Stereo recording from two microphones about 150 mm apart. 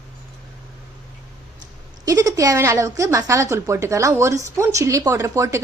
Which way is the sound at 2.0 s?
25° right (ahead or behind).